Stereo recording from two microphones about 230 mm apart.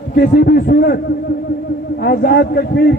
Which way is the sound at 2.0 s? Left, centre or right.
Left.